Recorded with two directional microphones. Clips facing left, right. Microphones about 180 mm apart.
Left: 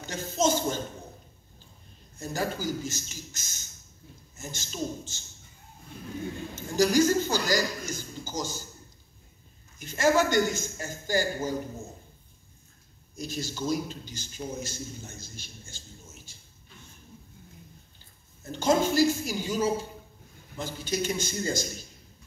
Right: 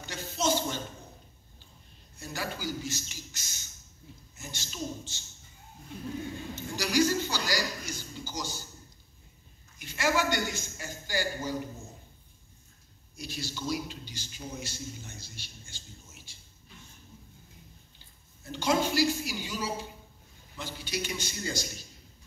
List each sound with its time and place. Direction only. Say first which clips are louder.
0.0 s a sound: left 5 dB; 45° left (ahead or behind)
2.1 s a man's voice: left 6 dB; 45° left (ahead or behind)
6.5 s a sound: left 7 dB; 45° left (ahead or behind)
9.8 s a man's voice: left 5 dB; 45° left (ahead or behind)
13.1 s a man's voice: left 4 dB; 45° left (ahead or behind)
18.4 s a man's voice: left 4 dB; 45° left (ahead or behind)